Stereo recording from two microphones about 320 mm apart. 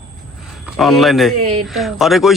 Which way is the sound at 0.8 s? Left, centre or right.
Centre.